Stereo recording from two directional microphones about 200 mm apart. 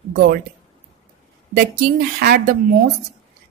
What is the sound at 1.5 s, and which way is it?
Speech, 50° right (ahead or behind).